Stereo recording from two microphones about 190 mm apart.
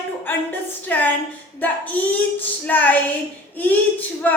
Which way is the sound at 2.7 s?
10° left (ahead or behind).